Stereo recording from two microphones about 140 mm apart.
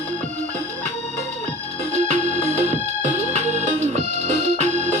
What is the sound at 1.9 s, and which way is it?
Music, 55° right (ahead or behind).